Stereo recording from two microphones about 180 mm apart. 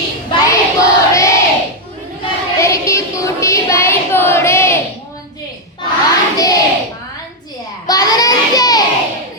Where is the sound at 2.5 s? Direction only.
15° left (ahead or behind).